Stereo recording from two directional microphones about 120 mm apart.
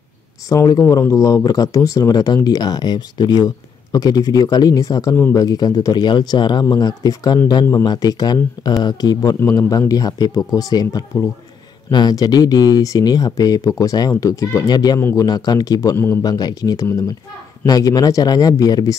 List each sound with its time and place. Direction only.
0.5 s speech: 25° left (ahead or behind)